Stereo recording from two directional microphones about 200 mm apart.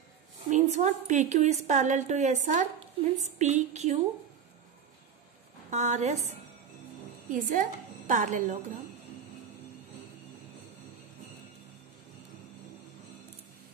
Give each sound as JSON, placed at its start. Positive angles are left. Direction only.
{"t": 0.5, "sound": "a woman's voice", "side_deg": -35}
{"t": 5.7, "sound": "a woman's voice", "side_deg": -35}
{"t": 7.2, "sound": "a woman's voice", "side_deg": -40}